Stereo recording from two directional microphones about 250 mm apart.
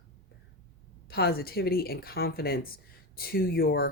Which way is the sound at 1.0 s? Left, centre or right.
Left.